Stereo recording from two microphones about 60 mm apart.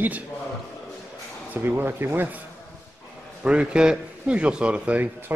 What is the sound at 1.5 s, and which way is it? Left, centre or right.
Speech, right.